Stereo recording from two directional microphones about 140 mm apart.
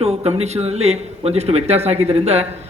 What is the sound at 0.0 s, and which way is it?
Speech, 50° right (ahead or behind).